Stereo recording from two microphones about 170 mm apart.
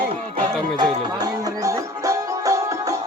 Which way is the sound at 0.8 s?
20° right (ahead or behind).